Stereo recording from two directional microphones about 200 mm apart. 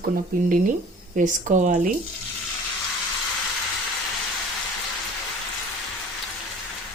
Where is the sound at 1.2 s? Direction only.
40° right (ahead or behind).